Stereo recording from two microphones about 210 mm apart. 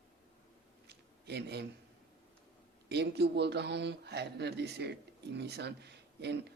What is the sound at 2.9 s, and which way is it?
Speech, 50° right (ahead or behind).